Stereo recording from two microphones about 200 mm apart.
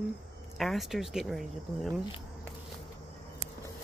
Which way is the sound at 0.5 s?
Centre (ahead or behind).